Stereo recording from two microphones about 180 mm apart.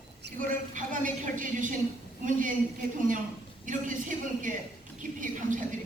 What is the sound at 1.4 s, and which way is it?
A woman's voice, 45° right (ahead or behind).